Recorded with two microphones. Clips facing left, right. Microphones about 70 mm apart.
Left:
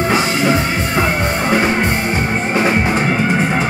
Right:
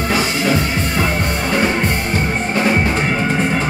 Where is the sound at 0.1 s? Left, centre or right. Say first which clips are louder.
Even; left.